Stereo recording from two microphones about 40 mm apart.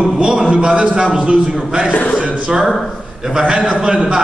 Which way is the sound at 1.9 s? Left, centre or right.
Left.